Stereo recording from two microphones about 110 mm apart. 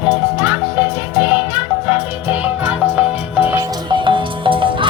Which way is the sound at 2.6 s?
15° right (ahead or behind).